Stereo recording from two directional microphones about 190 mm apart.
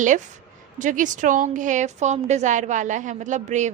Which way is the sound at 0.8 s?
40° right (ahead or behind).